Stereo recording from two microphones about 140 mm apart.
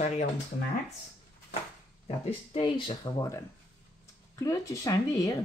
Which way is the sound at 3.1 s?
25° left (ahead or behind).